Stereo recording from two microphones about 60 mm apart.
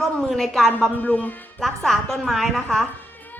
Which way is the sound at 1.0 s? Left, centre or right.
Left.